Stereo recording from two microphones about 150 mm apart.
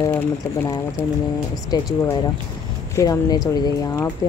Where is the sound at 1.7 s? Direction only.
25° left (ahead or behind).